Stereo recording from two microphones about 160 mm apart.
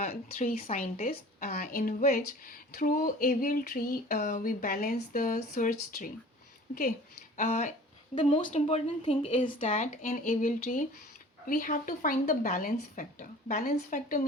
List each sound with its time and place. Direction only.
0.3 s a woman's voice: 55° left (ahead or behind)
7.3 s speech: 50° left (ahead or behind)
8.1 s speech: 35° left (ahead or behind)
8.4 s speech: 45° left (ahead or behind)
9.8 s a woman's voice: 55° left (ahead or behind)